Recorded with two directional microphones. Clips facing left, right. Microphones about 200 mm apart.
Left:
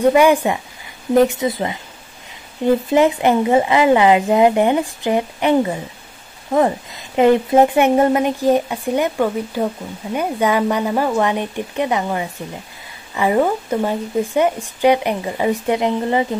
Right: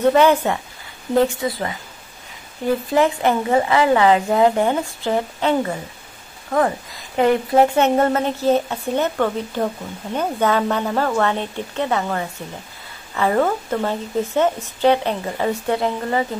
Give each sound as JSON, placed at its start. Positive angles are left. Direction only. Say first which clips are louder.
{"t": 0.0, "sound": "a woman's voice", "louder": "left 2 dB", "side_deg": 10}